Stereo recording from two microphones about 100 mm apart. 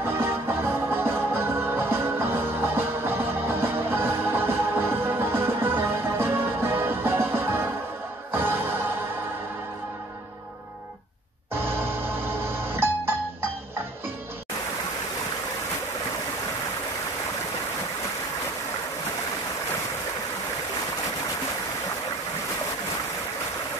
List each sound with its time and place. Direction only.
0.0 s music: 25° right (ahead or behind)
11.5 s music: 25° right (ahead or behind)